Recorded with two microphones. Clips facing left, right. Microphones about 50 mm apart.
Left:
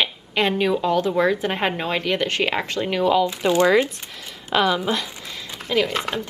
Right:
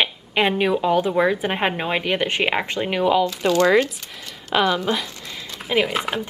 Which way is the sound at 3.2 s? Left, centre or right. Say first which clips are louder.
Even; left.